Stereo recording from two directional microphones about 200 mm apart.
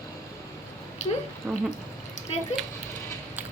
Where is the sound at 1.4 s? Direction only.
5° right (ahead or behind).